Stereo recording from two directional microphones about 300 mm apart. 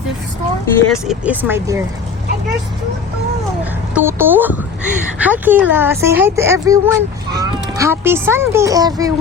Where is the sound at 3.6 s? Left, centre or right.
Centre.